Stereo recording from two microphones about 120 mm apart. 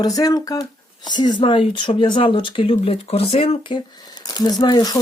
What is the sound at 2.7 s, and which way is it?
Speech, 60° left (ahead or behind).